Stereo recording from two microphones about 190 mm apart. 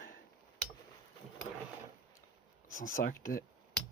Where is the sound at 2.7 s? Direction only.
45° left (ahead or behind).